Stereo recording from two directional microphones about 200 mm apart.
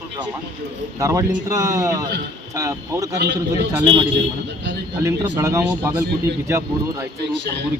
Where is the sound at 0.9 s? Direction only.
15° right (ahead or behind).